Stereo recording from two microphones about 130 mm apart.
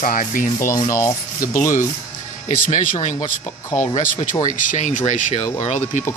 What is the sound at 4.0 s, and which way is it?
Speech, 80° left.